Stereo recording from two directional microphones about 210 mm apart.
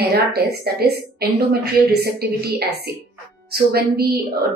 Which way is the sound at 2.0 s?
50° right (ahead or behind).